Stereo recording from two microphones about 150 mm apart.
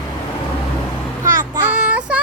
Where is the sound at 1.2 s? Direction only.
25° right (ahead or behind).